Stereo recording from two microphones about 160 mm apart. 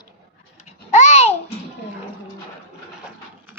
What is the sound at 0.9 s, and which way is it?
Babbling, 45° left (ahead or behind).